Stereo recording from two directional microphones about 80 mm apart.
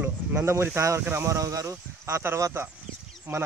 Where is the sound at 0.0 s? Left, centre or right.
Right.